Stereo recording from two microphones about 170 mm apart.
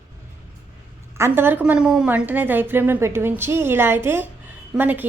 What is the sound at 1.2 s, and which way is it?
A woman's voice, 15° right (ahead or behind).